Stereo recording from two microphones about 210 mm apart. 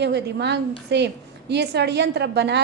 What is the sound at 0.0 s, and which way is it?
A woman's voice, 55° right (ahead or behind).